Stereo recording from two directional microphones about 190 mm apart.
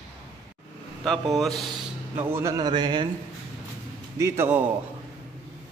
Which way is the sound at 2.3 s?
20° right (ahead or behind).